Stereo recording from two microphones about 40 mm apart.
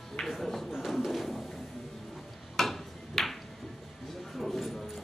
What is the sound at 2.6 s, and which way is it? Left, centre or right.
Tick-tock, centre.